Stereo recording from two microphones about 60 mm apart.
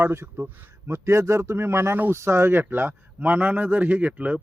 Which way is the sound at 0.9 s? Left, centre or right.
Right.